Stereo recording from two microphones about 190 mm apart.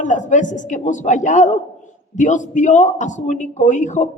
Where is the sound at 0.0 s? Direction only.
40° left (ahead or behind).